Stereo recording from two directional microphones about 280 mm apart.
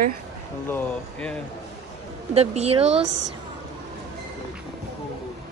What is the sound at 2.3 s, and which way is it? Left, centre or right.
Speech, right.